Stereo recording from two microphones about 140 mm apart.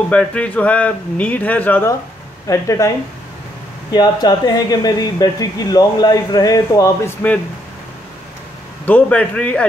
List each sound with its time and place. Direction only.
0.1 s speech: 10° left (ahead or behind); by 2.9 s 25° left (ahead or behind)
3.9 s speech: 30° left (ahead or behind)
8.8 s speech: 10° left (ahead or behind)